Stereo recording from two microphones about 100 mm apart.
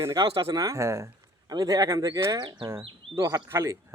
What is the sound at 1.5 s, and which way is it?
Speech, 40° right (ahead or behind).